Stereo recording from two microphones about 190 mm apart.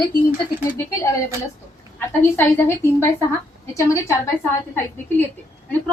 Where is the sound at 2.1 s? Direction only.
10° left (ahead or behind).